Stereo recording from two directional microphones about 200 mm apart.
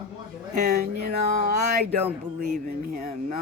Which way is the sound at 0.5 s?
50° right (ahead or behind).